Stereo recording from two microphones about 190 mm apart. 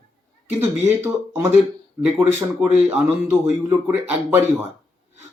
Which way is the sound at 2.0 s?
5° right (ahead or behind).